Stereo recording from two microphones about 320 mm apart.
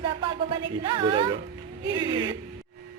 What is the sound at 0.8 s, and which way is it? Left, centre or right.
Speech, centre.